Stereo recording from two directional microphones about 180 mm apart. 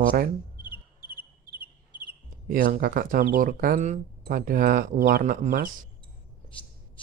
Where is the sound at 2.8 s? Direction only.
50° right (ahead or behind).